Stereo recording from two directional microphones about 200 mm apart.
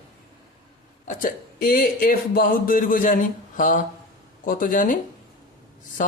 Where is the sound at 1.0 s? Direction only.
45° left (ahead or behind).